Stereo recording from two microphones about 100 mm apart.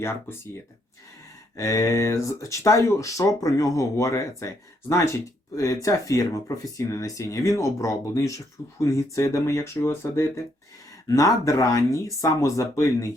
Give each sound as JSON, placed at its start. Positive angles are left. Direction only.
{"t": 0.0, "sound": "speech", "side_deg": 25}